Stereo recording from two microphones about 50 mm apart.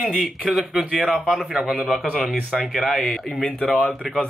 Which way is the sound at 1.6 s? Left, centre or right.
Centre.